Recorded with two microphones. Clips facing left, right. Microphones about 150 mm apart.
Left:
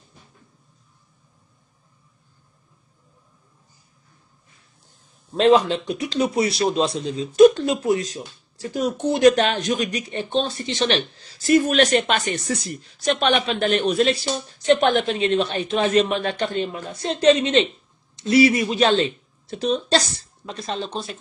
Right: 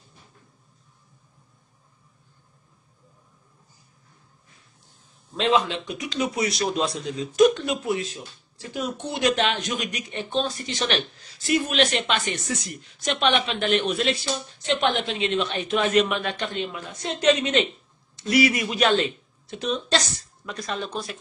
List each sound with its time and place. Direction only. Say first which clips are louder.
5.3 s a man's voice: left 6 dB; 40° left (ahead or behind); by 21.2 s 25° left (ahead or behind)